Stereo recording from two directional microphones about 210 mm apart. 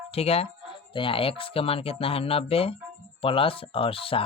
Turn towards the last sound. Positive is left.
turn(degrees=25)  # may be behind; listen again after turning